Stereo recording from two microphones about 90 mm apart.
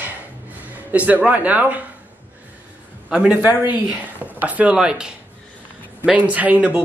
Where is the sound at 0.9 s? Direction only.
15° right (ahead or behind).